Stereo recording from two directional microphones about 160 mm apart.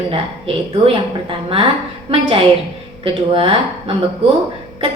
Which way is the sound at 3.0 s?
35° right (ahead or behind).